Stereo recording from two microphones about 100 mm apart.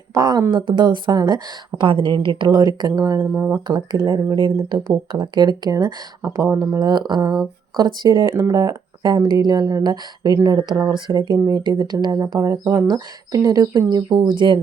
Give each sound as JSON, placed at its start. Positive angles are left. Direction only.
{"t": 0.1, "sound": "a sound", "side_deg": -40}
{"t": 0.5, "sound": "speech", "side_deg": -45}
{"t": 1.8, "sound": "a woman's voice", "side_deg": -60}
{"t": 3.3, "sound": "speech", "side_deg": -20}
{"t": 3.7, "sound": "speech", "side_deg": -45}
{"t": 12.4, "sound": "speech", "side_deg": -25}
{"t": 13.4, "sound": "speech", "side_deg": -35}